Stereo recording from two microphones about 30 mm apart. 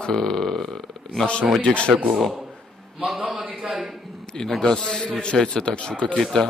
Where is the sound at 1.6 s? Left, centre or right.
Left.